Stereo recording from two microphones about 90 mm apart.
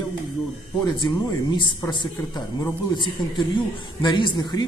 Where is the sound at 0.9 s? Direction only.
55° left (ahead or behind).